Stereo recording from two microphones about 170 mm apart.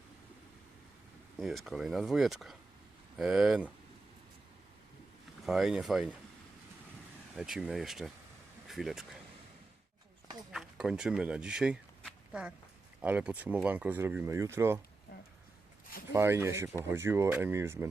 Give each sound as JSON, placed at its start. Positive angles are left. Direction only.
{"t": 1.4, "sound": "speech", "side_deg": 0}
{"t": 5.5, "sound": "speech", "side_deg": 0}
{"t": 7.3, "sound": "speech", "side_deg": -5}
{"t": 10.5, "sound": "speech", "side_deg": -5}
{"t": 15.1, "sound": "a sound", "side_deg": 65}
{"t": 16.1, "sound": "speech", "side_deg": -15}